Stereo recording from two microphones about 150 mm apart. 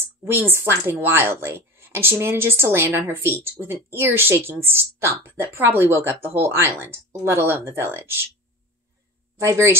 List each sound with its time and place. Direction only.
0.0 s speech: 15° right (ahead or behind)
9.4 s speech: 20° right (ahead or behind)